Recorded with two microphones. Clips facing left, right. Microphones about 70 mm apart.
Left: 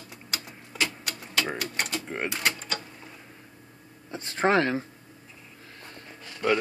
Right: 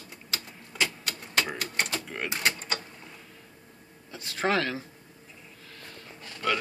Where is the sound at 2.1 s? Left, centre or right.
Centre.